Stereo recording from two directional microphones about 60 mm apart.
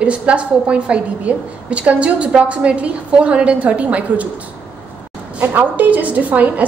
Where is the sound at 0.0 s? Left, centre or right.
Centre.